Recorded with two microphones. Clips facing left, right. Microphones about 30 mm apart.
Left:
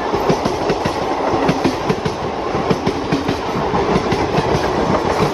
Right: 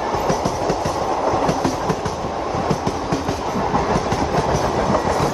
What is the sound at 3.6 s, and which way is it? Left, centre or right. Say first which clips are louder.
Train: left 2 dB; left.